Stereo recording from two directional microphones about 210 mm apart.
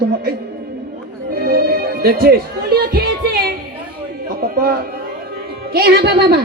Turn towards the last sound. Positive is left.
turn(degrees=-50)  # may be behind; listen again after turning